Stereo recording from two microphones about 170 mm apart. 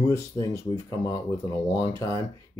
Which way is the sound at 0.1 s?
15° left (ahead or behind).